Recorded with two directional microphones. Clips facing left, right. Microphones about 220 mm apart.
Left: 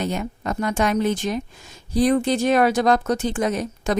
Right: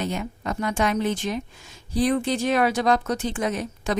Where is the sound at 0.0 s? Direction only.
45° left (ahead or behind).